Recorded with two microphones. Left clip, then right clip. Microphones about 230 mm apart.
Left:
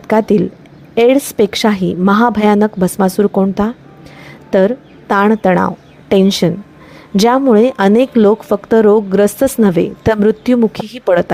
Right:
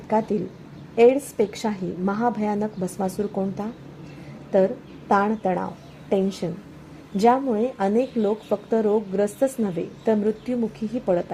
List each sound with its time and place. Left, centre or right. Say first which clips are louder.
0.1 s a woman's voice: left 11 dB; left